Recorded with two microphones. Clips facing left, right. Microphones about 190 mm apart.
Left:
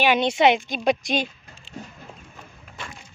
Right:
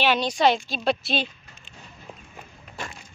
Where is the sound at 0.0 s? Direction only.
15° left (ahead or behind).